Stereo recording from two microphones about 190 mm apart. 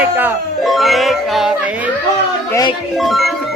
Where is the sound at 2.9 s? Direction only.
Centre (ahead or behind).